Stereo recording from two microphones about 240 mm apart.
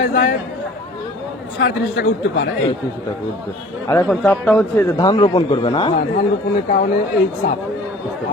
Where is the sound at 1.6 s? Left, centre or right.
Left.